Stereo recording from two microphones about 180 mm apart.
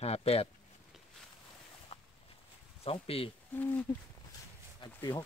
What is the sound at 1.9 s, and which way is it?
Walk, 30° left (ahead or behind).